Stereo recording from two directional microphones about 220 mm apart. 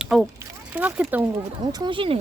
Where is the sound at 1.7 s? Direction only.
20° right (ahead or behind).